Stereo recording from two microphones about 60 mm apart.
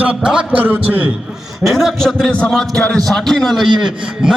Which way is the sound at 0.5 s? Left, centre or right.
Right.